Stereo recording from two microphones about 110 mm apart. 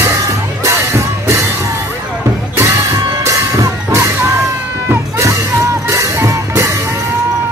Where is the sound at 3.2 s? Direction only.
30° right (ahead or behind).